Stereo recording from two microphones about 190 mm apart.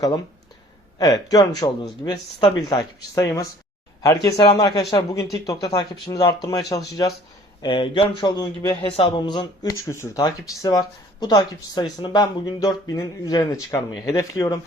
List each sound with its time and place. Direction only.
0.9 s speech: 20° left (ahead or behind)